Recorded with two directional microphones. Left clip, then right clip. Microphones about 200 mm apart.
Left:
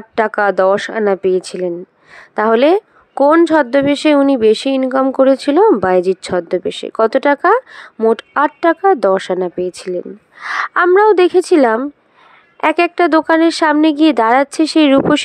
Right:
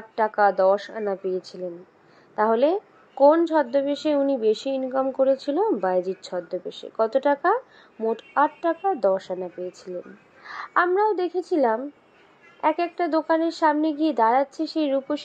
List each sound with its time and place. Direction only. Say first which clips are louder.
0.1 s a woman's voice: left 7 dB; 35° left (ahead or behind)